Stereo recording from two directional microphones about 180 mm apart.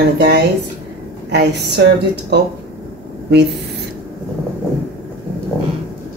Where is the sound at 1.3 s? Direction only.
70° right (ahead or behind).